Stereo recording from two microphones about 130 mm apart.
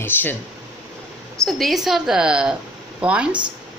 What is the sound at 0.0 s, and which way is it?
Speech, 15° left (ahead or behind).